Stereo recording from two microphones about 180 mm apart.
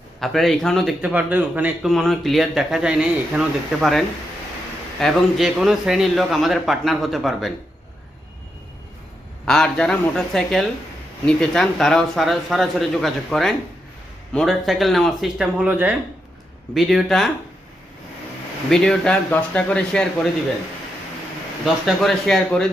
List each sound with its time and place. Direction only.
0.2 s a man's voice: centre (ahead or behind)
9.5 s a man's voice: 5° left (ahead or behind)
18.7 s a man's voice: 5° left (ahead or behind)
21.6 s a man's voice: centre (ahead or behind)